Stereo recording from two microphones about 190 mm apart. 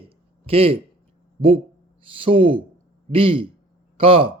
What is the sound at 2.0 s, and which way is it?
Speech, 30° right (ahead or behind).